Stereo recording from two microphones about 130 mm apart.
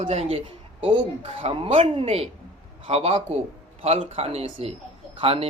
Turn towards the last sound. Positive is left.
turn(degrees=-50)  # may be behind; listen again after turning